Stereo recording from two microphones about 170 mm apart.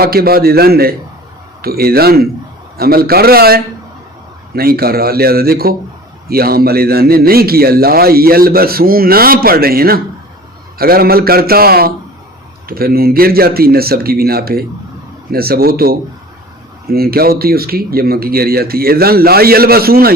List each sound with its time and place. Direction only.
0.0 s a man's voice: 65° right (ahead or behind)